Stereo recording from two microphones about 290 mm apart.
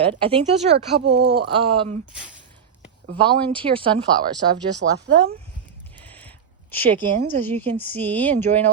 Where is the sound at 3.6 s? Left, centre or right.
Centre.